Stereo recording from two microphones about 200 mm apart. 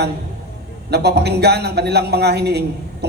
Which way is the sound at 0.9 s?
55° right (ahead or behind).